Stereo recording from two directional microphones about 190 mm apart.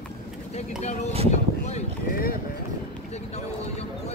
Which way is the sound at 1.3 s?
35° left (ahead or behind).